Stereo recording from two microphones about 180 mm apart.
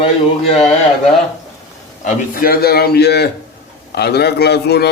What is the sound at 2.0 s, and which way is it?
A man's voice, 55° left (ahead or behind).